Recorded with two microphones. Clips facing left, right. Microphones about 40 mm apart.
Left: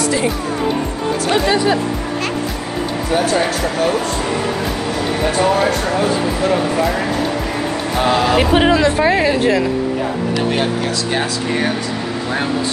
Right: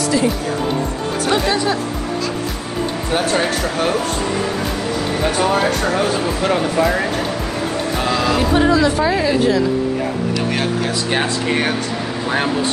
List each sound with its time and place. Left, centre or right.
8.1 s speech: left